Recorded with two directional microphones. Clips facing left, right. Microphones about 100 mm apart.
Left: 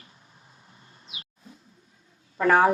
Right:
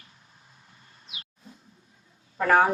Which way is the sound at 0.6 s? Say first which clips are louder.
Left 2 dB; 30° left (ahead or behind).